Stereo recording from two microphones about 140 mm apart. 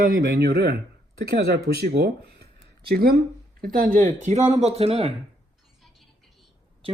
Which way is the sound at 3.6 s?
85° right.